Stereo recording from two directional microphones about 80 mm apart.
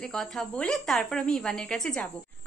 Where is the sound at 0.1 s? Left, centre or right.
Centre.